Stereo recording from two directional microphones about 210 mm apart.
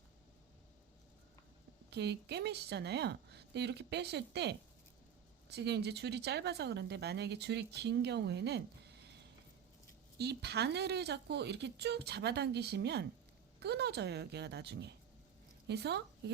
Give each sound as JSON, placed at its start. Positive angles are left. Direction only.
{"t": 1.9, "sound": "a woman's voice", "side_deg": -55}